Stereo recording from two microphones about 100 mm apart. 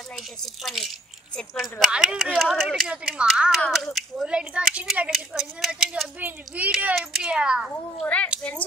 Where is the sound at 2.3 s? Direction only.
Centre (ahead or behind).